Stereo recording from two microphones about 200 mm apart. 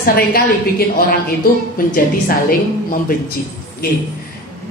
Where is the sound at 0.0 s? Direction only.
50° left (ahead or behind).